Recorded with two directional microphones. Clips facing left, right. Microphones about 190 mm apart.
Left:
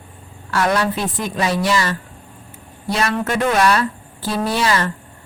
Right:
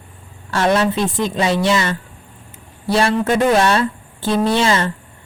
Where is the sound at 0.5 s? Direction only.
25° right (ahead or behind).